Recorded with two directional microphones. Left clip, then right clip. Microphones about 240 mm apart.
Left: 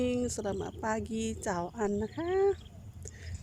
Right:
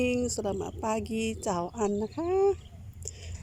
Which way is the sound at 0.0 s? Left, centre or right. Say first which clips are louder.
Right 3 dB; centre.